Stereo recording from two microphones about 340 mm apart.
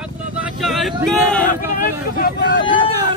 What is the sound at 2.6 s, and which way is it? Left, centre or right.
Speech, centre.